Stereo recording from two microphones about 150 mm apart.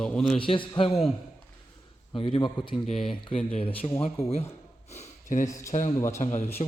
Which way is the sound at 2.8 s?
Centre (ahead or behind).